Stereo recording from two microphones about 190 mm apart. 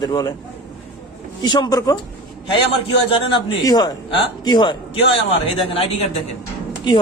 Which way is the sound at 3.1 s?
30° left (ahead or behind).